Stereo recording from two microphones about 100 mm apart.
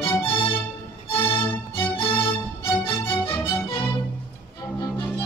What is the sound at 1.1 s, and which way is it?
Violin, 65° left (ahead or behind).